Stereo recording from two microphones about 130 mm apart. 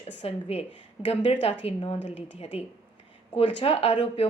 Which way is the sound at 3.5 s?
50° left (ahead or behind).